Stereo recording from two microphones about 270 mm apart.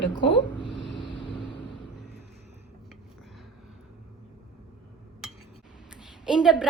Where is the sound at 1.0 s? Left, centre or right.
Centre.